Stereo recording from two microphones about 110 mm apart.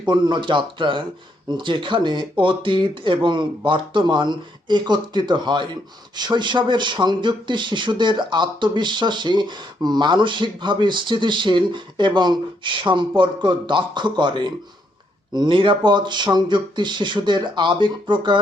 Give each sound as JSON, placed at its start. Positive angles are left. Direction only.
{"t": 0.0, "sound": "speech", "side_deg": -45}